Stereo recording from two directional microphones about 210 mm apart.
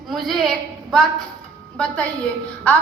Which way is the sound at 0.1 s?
Centre (ahead or behind).